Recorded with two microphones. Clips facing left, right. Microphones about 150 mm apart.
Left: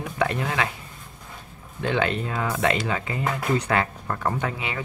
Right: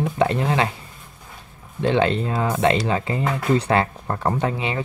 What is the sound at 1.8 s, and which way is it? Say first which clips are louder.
Speech: right 5 dB; 30° right (ahead or behind).